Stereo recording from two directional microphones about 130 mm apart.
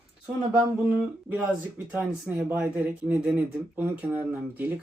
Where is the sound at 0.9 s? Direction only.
15° right (ahead or behind).